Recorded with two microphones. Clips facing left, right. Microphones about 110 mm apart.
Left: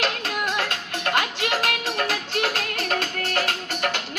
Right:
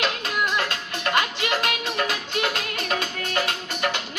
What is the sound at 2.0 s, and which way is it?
Music, 15° right (ahead or behind).